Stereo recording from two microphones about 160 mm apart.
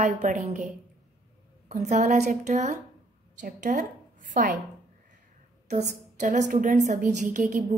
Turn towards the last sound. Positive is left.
turn(degrees=-55)  # may be behind; listen again after turning